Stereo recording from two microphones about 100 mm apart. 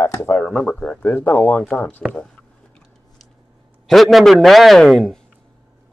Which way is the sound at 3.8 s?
Centre (ahead or behind).